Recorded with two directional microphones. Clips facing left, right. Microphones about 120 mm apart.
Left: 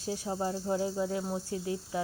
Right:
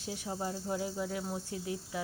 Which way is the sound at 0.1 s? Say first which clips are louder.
Left 5 dB; 35° left (ahead or behind).